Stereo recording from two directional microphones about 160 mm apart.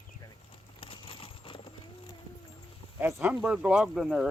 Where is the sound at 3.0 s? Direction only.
10° right (ahead or behind).